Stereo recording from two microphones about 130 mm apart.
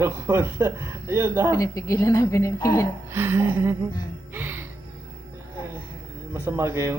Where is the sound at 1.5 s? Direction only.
25° left (ahead or behind).